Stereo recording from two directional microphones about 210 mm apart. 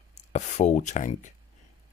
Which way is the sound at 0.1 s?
35° left (ahead or behind).